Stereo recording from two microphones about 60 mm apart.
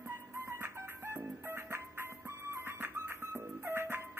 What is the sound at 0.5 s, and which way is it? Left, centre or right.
Music, right.